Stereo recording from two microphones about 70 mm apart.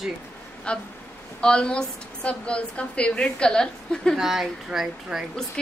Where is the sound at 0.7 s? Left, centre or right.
Centre.